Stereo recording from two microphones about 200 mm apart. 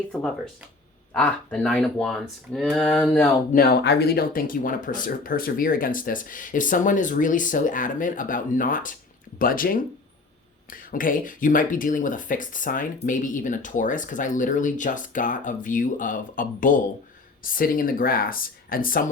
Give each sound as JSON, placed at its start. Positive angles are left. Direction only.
{"t": 0.1, "sound": "speech", "side_deg": 5}
{"t": 3.5, "sound": "speech", "side_deg": 50}